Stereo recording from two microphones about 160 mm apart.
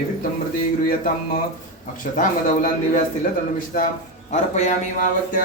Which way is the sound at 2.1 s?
55° left (ahead or behind).